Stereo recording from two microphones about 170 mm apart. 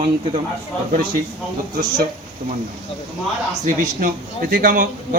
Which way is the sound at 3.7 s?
50° right (ahead or behind).